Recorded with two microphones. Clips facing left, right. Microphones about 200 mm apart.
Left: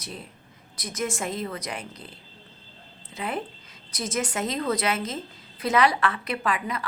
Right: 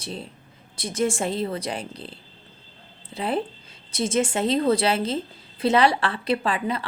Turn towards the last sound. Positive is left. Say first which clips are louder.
# right 4 dB
turn(degrees=-30)  # may be behind; listen again after turning